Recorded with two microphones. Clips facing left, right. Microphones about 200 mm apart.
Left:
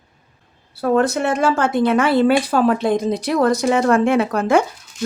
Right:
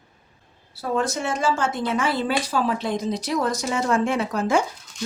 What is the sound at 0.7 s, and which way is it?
Speech, 60° left (ahead or behind).